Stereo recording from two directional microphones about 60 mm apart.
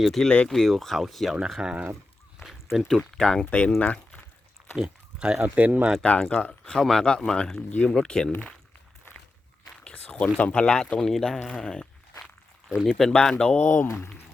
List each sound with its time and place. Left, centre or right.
0.0 s speech: centre
1.6 s speech: centre
2.7 s speech: centre
3.0 s speech: centre
4.8 s speech: centre
5.4 s speech: right
6.0 s speech: centre
9.8 s a sound: left
10.3 s speech: left
13.6 s speech: left